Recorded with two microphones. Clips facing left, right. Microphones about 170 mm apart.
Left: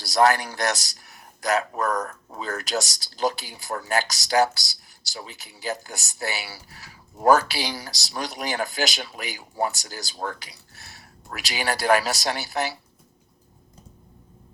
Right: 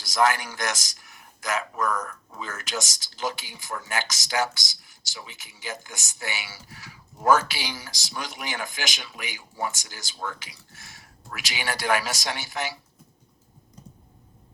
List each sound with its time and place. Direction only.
0.0 s a man's voice: 35° left (ahead or behind)